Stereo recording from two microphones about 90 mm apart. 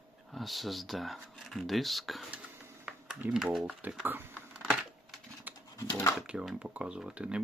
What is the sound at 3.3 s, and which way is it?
Speech, 5° right (ahead or behind).